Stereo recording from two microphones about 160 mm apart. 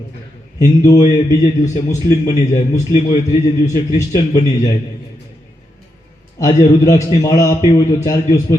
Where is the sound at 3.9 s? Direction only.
20° left (ahead or behind).